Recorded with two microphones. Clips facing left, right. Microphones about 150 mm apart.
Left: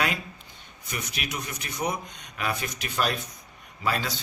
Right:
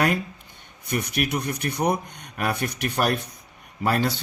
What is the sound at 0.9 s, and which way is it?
A man's voice, 60° right (ahead or behind).